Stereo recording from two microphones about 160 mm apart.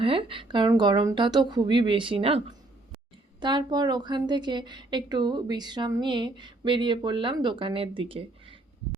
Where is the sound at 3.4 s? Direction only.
25° right (ahead or behind).